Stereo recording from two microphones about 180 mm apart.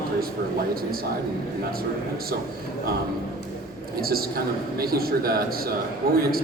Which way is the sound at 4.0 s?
55° right (ahead or behind).